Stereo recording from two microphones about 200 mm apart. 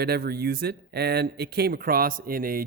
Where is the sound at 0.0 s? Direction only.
50° right (ahead or behind).